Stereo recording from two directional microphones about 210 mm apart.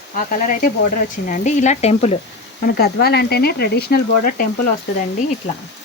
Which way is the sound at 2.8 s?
50° left (ahead or behind).